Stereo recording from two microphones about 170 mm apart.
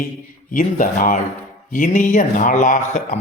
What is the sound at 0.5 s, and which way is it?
Speech, 55° left (ahead or behind).